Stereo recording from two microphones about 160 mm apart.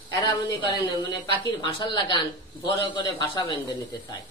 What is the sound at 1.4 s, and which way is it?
A man's voice, 25° left (ahead or behind).